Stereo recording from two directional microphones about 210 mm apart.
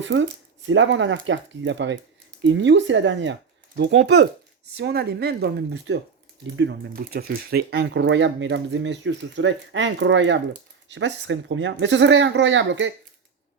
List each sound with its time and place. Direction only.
0.0 s speech: 60° right (ahead or behind)